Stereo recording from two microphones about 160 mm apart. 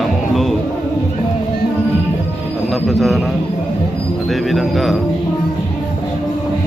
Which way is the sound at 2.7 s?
Centre (ahead or behind).